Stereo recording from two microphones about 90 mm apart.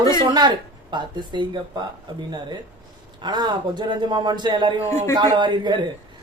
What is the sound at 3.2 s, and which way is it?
Speech, 55° right (ahead or behind).